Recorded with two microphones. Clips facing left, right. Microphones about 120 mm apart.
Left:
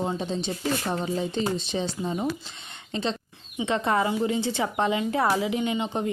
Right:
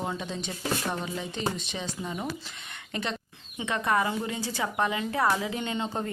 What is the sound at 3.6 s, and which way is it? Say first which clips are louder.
Speech: left 3 dB; 25° left (ahead or behind).